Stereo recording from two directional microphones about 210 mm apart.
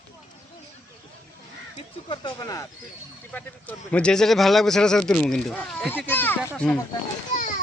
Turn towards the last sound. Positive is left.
turn(degrees=40)  # may be behind; listen again after turning